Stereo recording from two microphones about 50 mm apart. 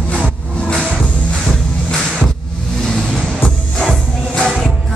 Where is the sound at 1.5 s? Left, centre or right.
Centre.